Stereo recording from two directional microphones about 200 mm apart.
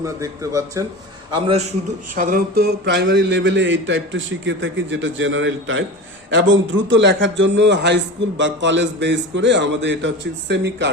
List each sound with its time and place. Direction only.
0.0 s speech: 15° right (ahead or behind)
1.3 s a man's voice: 25° right (ahead or behind)
2.1 s a man's voice: 45° right (ahead or behind); by 10.8 s 60° right (ahead or behind)